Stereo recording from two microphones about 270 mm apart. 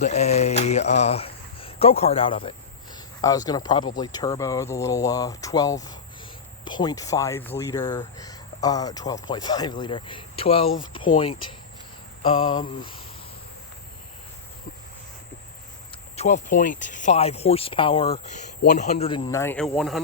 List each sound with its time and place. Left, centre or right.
0.0 s speech: left
16.1 s speech: left
18.6 s speech: left; by 20.0 s centre